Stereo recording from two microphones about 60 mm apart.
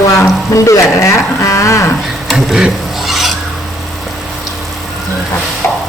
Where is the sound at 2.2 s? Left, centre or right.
Centre.